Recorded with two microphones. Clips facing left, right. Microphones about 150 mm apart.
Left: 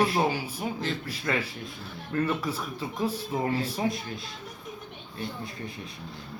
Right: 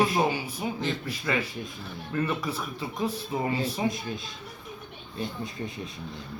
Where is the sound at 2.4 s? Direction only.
10° left (ahead or behind).